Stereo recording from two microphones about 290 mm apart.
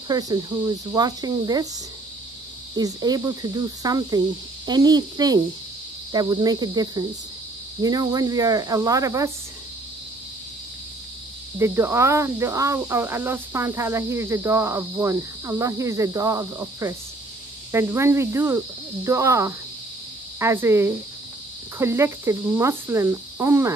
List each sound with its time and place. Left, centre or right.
0.1 s speech: centre
2.7 s speech: centre
11.5 s speech: centre